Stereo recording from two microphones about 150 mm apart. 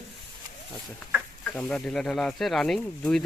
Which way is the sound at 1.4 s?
5° left (ahead or behind).